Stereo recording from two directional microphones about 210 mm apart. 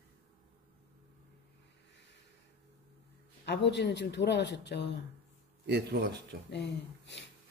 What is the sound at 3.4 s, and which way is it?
Speech, 55° left (ahead or behind).